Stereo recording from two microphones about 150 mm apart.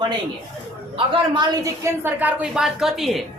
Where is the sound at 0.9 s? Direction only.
35° right (ahead or behind).